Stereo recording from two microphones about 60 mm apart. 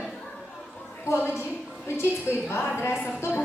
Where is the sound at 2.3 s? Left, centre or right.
Left.